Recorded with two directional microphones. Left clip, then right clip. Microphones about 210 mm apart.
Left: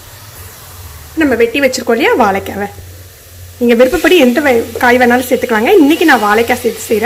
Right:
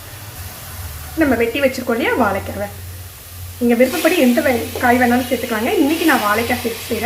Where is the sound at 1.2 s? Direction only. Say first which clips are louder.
Left 5 dB; 40° left (ahead or behind).